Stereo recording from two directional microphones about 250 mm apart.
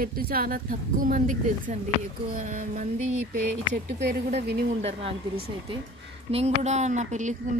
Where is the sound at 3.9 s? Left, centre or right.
Right.